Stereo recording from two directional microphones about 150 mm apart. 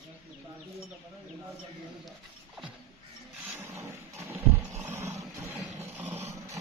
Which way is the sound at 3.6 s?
20° right (ahead or behind).